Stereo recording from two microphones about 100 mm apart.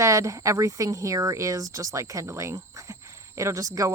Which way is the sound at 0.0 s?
30° right (ahead or behind).